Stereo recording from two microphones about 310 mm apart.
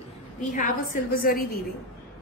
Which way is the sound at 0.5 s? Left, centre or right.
Left.